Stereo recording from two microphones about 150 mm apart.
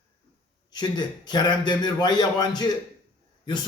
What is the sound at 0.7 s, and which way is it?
Speech, 30° left (ahead or behind).